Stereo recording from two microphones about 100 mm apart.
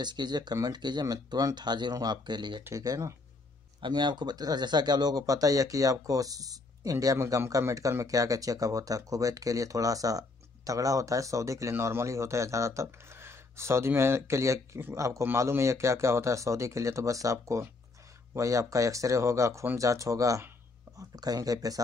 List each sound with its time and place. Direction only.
0.0 s speech: 45° right (ahead or behind)
2.8 s speech: 35° right (ahead or behind)
3.8 s speech: 50° right (ahead or behind)